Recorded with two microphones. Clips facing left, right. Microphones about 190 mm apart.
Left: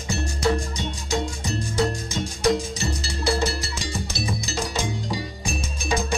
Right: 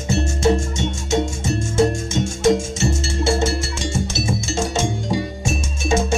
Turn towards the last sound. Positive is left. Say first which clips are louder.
# right 6 dB
turn(degrees=-25)  # may be behind; listen again after turning